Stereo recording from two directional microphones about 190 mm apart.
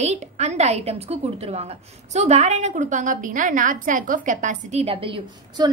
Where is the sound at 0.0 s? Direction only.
35° right (ahead or behind).